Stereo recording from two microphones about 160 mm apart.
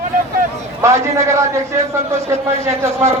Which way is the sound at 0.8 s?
20° right (ahead or behind).